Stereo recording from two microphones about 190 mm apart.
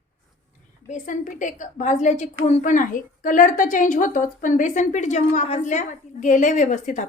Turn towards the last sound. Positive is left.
turn(degrees=40)  # may be behind; listen again after turning